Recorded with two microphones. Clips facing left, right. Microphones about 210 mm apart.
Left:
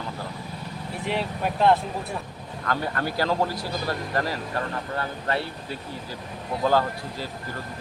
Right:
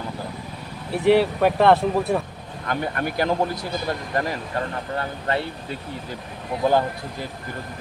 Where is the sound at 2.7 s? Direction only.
20° right (ahead or behind).